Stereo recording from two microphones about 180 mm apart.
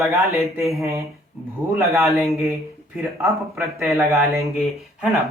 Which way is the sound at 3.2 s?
15° right (ahead or behind).